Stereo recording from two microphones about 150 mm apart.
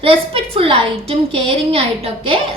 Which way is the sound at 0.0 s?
40° right (ahead or behind).